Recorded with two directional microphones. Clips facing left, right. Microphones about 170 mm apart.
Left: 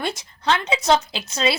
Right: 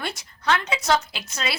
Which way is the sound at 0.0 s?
25° left (ahead or behind).